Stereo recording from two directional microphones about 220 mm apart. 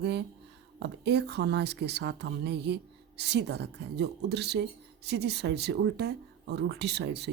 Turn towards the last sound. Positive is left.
turn(degrees=-50)  # may be behind; listen again after turning